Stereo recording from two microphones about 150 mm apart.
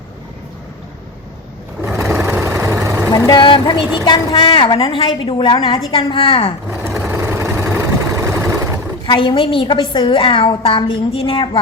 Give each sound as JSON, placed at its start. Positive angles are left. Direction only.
{"t": 2.0, "sound": "vehicle", "side_deg": -20}
{"t": 3.1, "sound": "a woman's voice", "side_deg": 25}
{"t": 7.1, "sound": "vehicle", "side_deg": -15}
{"t": 9.0, "sound": "a woman's voice", "side_deg": 35}